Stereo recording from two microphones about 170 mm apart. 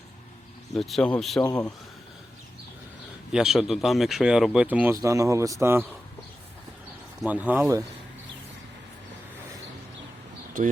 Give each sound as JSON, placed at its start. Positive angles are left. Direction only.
{"t": 0.7, "sound": "speech", "side_deg": 0}
{"t": 3.3, "sound": "a man's voice", "side_deg": -5}
{"t": 7.2, "sound": "speech", "side_deg": -10}